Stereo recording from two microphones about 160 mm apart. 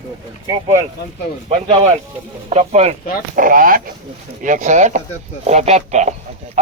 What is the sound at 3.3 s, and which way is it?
Speech, 60° right (ahead or behind).